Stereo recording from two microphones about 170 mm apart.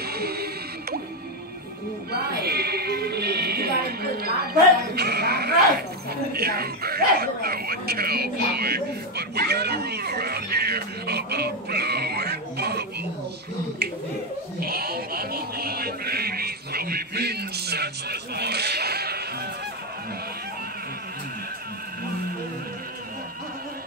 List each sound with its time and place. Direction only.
0.0 s music: 65° right (ahead or behind)
2.1 s music: 70° right (ahead or behind)
6.3 s a sound: 65° right (ahead or behind)
14.6 s music: 65° right (ahead or behind)